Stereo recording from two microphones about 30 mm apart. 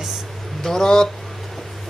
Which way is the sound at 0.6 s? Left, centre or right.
Centre.